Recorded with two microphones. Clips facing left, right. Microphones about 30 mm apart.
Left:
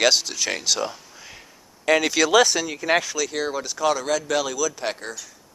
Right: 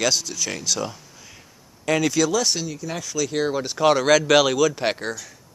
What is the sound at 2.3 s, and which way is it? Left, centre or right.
Speech, left.